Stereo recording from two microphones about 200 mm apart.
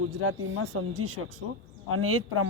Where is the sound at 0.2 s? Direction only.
90° right.